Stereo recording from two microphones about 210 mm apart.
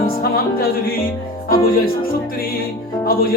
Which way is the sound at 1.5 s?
45° left (ahead or behind).